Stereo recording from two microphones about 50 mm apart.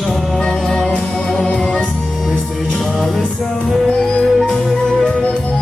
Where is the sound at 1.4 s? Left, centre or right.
Left.